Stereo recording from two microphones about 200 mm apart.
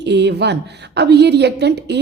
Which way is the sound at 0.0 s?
60° right (ahead or behind).